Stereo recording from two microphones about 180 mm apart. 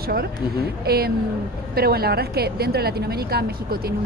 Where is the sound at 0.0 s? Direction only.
60° right (ahead or behind).